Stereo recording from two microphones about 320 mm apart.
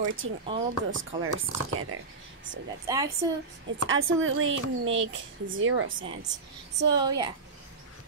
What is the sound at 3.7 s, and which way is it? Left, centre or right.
Speech, right.